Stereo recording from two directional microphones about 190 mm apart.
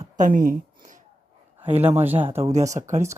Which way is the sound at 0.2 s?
45° right (ahead or behind).